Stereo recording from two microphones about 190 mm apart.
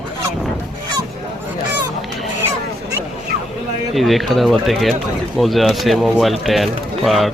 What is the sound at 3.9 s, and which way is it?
A man's voice, centre (ahead or behind).